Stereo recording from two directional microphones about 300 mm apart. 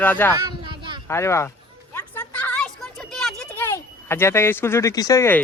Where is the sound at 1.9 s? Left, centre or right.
Centre.